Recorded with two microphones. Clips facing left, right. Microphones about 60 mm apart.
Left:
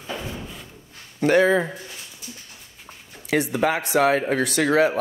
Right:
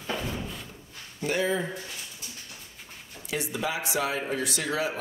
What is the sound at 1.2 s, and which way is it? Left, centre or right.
Speech, left.